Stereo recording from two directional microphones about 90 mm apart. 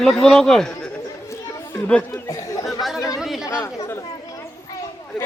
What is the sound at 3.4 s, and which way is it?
Speech, 35° left (ahead or behind).